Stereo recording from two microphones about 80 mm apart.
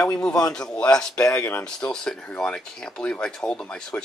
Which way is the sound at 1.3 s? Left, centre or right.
Left.